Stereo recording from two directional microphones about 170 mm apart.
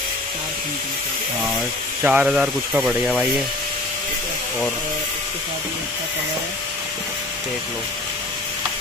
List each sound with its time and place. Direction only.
2.0 s speech: 10° right (ahead or behind)